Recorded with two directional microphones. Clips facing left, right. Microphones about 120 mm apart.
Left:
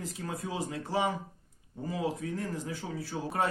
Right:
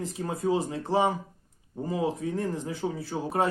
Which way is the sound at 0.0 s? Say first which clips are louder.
Right 8 dB; 25° right (ahead or behind).